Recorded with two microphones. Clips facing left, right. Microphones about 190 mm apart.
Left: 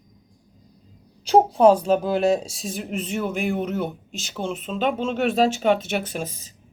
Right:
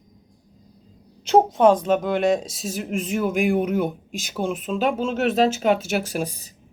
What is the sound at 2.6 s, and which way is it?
Speech, 5° right (ahead or behind).